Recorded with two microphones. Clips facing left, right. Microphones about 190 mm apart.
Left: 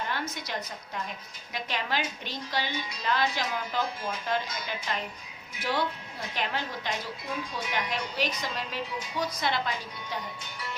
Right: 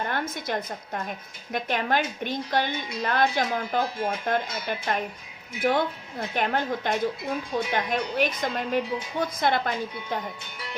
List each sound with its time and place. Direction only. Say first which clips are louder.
0.0 s a woman's voice: right 4 dB; 50° right (ahead or behind)